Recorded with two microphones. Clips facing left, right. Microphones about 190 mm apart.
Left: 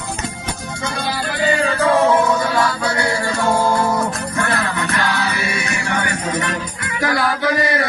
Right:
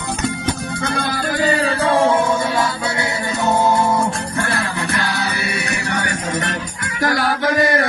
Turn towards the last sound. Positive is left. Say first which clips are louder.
# right 2 dB
turn(degrees=-50)  # may be behind; listen again after turning